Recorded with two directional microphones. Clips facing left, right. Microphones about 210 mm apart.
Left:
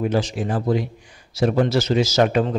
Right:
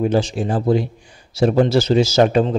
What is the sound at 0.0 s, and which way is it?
A man's voice, 30° right (ahead or behind).